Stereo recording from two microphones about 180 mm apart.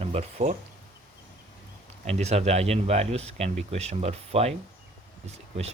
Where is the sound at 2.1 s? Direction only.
35° right (ahead or behind).